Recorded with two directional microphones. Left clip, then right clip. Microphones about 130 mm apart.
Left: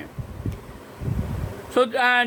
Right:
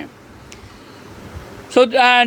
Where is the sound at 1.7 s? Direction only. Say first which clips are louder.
Right 7 dB; 40° right (ahead or behind).